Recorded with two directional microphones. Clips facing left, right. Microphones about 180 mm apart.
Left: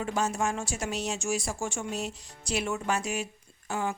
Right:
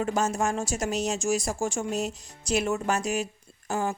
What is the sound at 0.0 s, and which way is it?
Speech, 45° right (ahead or behind).